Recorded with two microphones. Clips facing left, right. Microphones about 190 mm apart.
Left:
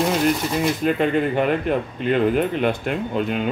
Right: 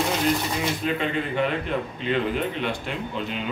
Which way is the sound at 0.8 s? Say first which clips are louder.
Left 8 dB; 50° left (ahead or behind).